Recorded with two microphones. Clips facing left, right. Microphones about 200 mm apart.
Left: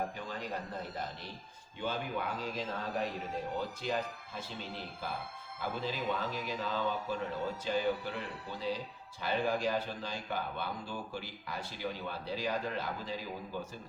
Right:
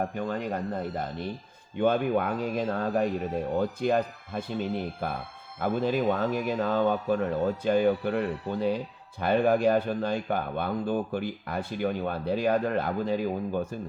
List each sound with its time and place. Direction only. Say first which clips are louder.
0.2 s a man's voice: right 10 dB; 55° right (ahead or behind)